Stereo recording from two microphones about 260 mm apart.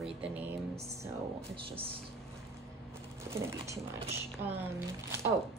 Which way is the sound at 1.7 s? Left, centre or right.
Right.